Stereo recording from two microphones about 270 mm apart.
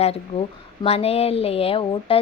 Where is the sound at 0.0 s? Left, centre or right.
Left.